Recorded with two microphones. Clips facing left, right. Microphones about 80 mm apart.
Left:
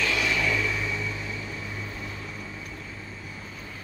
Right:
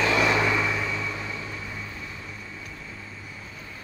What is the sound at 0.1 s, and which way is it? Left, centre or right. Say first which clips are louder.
Vehicle: right 5 dB; right.